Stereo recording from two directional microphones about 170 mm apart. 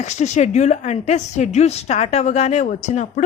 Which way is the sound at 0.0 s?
45° left (ahead or behind).